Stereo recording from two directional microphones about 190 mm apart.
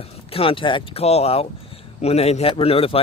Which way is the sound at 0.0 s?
30° left (ahead or behind).